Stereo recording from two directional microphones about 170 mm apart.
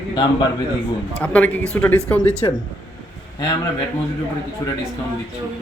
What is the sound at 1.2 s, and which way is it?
Speech, 10° left (ahead or behind).